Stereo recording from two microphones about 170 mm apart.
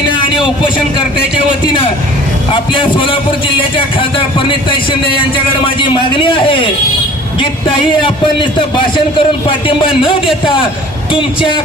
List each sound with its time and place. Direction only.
1.6 s a man's voice: 30° left (ahead or behind)
9.1 s a man's voice: 30° left (ahead or behind)
10.0 s a man's voice: centre (ahead or behind)
11.1 s speech: 30° left (ahead or behind)